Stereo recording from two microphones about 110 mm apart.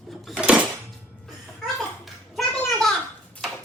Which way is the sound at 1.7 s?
Centre (ahead or behind).